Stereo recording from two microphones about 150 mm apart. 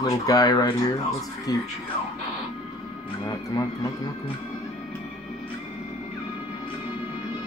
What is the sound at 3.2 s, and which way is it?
Speech, 25° left (ahead or behind).